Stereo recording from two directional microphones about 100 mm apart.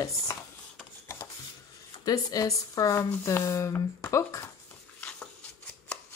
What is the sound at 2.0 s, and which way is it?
Speech, 35° left (ahead or behind).